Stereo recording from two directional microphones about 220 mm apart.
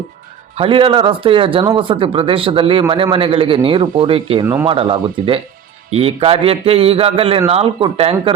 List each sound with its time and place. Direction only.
0.5 s a man's voice: 25° right (ahead or behind)